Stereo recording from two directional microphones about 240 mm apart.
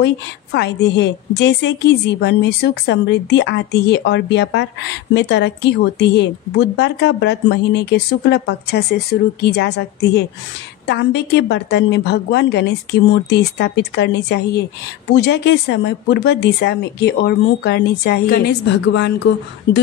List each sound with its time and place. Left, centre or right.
0.0 s a woman's voice: left